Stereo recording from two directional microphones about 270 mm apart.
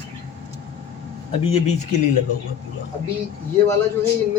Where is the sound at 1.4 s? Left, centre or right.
Left.